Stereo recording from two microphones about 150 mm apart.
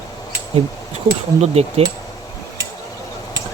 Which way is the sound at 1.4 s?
45° right (ahead or behind).